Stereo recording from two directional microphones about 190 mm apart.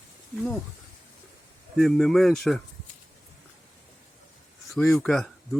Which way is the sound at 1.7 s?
Centre (ahead or behind).